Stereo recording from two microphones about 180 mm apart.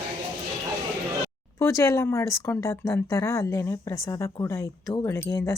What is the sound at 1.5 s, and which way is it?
Speech, 15° left (ahead or behind).